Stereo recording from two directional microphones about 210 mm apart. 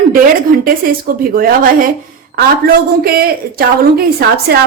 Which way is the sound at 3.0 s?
45° right (ahead or behind).